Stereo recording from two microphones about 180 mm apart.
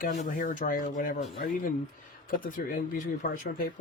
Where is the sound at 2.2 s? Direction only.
50° left (ahead or behind).